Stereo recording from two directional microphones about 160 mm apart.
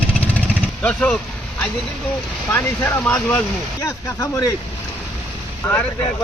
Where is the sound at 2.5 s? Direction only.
15° left (ahead or behind).